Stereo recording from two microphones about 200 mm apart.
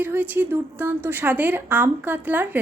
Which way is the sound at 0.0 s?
10° right (ahead or behind).